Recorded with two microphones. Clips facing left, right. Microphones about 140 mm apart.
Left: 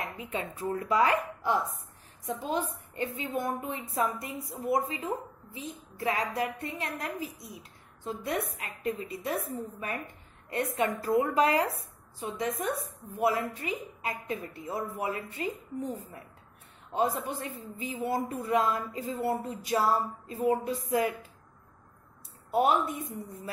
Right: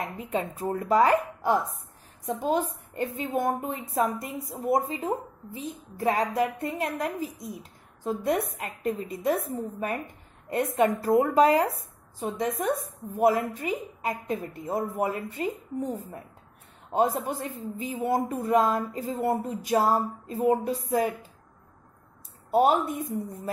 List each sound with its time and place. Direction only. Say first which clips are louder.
0.0 s a woman's voice: right 5 dB; 40° right (ahead or behind)
22.5 s a woman's voice: right 4 dB; 35° right (ahead or behind)